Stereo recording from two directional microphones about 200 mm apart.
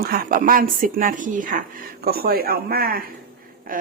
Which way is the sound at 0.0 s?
45° right (ahead or behind).